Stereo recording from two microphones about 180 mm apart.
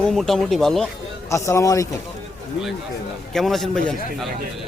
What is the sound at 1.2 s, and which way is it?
Speech, 15° left (ahead or behind).